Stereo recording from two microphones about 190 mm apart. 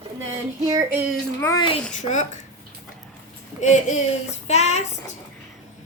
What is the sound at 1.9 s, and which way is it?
Speech, 40° left (ahead or behind).